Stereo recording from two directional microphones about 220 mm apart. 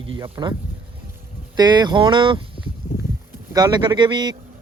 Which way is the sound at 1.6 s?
20° right (ahead or behind).